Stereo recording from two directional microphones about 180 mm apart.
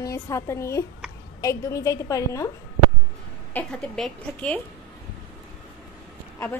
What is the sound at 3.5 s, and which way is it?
Speech, 5° left (ahead or behind).